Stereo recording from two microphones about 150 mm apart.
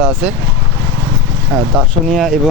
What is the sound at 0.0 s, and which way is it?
Speech, 5° right (ahead or behind).